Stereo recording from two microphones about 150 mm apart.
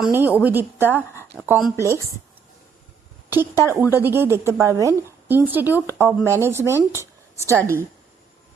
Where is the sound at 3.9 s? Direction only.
15° right (ahead or behind).